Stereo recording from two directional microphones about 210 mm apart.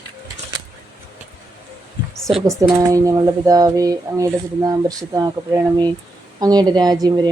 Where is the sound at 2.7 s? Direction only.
15° right (ahead or behind).